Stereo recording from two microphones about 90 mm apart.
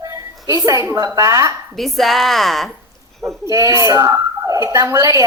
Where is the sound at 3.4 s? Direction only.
35° right (ahead or behind).